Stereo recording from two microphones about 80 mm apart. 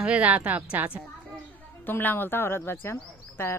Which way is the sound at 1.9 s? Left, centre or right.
Left.